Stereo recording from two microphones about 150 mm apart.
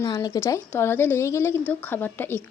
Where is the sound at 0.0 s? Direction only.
25° left (ahead or behind).